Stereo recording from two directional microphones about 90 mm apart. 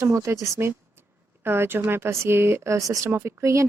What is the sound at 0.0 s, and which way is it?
Speech, 35° right (ahead or behind).